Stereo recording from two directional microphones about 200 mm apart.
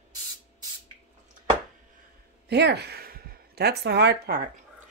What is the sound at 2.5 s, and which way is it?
A woman's voice, 55° right (ahead or behind).